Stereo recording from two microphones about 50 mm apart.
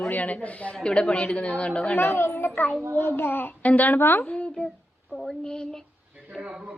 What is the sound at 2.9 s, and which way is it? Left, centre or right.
Child singing, left.